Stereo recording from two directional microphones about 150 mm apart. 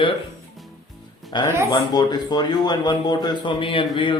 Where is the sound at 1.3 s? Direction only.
30° left (ahead or behind).